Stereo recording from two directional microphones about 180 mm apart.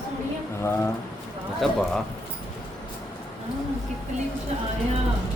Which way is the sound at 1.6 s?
Centre (ahead or behind).